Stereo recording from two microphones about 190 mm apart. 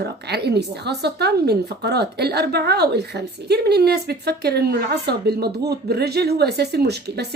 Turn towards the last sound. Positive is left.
turn(degrees=-60)  # may be behind; listen again after turning